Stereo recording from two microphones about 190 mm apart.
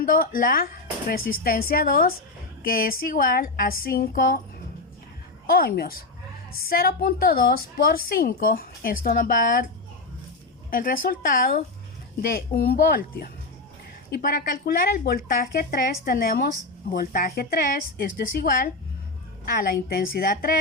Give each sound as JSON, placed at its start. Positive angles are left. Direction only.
{"t": 0.0, "sound": "a woman's voice", "side_deg": 50}
{"t": 5.5, "sound": "a woman's voice", "side_deg": 50}
{"t": 10.7, "sound": "a woman's voice", "side_deg": 50}